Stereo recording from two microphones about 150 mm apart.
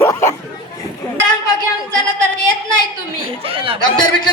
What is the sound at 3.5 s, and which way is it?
Speech, 35° right (ahead or behind).